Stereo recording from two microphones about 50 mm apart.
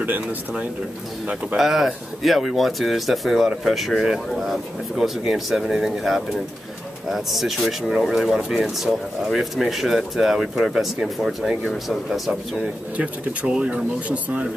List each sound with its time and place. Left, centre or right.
1.6 s speech: centre
12.3 s speech: right